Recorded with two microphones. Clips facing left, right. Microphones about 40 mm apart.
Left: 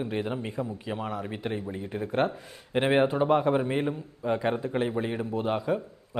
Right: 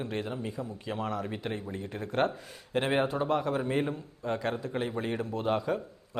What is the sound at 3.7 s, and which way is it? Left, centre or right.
A man's voice, centre.